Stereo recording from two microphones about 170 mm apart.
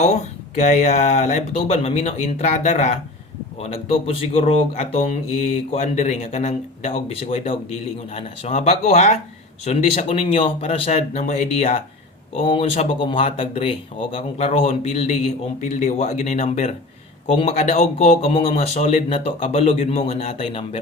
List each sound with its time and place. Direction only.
0.5 s speech: 45° left (ahead or behind)
12.4 s speech: 35° left (ahead or behind)